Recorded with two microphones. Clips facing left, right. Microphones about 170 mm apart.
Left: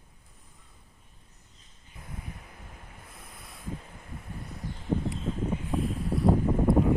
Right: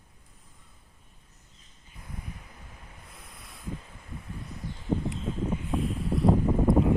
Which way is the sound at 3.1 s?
Centre (ahead or behind).